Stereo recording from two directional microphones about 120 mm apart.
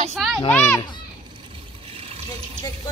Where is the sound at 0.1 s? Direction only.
Centre (ahead or behind).